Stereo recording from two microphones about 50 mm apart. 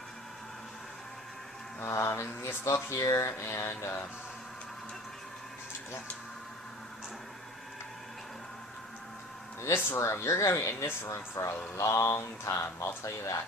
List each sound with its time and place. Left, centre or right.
1.9 s speech: left
3.4 s mantra: left
10.0 s speech: left